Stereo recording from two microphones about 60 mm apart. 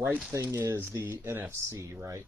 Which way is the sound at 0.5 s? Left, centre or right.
Right.